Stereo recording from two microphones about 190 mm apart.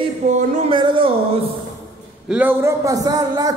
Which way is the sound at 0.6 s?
25° right (ahead or behind).